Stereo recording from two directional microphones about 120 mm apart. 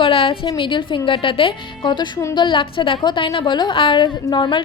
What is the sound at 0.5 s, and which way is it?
A woman's voice, 45° left (ahead or behind).